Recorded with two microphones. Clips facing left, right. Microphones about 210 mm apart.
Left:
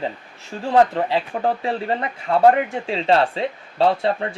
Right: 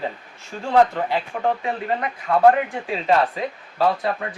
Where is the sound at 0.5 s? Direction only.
25° left (ahead or behind).